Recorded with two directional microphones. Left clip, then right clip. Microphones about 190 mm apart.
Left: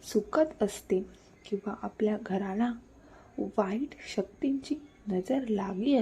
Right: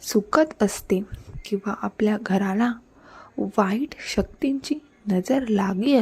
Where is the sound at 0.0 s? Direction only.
35° right (ahead or behind).